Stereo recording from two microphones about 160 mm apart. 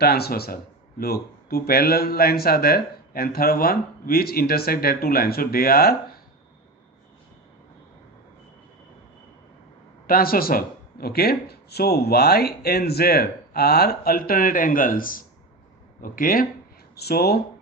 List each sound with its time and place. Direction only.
0.0 s speech: 80° left
10.1 s speech: 65° left (ahead or behind)
16.9 s speech: 85° left